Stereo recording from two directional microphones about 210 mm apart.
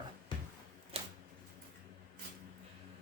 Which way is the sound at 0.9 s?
25° right (ahead or behind).